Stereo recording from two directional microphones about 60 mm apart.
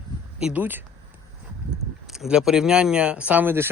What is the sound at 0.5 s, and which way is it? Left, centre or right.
Speech, right.